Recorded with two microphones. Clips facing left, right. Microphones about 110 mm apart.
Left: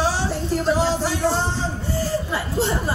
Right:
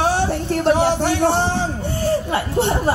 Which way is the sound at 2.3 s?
65° right (ahead or behind).